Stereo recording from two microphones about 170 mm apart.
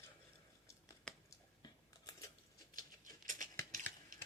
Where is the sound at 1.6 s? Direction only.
25° left (ahead or behind).